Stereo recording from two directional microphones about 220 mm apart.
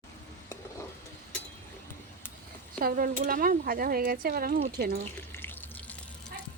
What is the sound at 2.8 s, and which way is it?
Speech, 40° right (ahead or behind).